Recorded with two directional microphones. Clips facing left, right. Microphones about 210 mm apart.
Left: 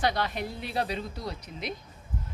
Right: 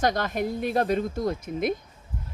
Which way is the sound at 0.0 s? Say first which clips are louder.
Right 4 dB; 45° right (ahead or behind).